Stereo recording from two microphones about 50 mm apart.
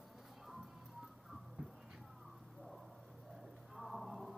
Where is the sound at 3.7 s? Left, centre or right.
Centre.